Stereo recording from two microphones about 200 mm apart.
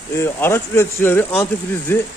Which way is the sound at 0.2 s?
10° left (ahead or behind).